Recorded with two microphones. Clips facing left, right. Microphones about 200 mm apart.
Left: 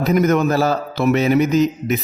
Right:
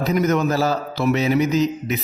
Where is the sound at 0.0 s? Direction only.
50° left (ahead or behind).